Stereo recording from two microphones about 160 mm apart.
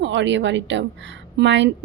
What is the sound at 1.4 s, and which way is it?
Speech, 90° right.